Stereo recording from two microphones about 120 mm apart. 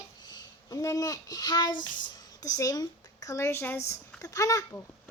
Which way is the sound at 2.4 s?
25° left (ahead or behind).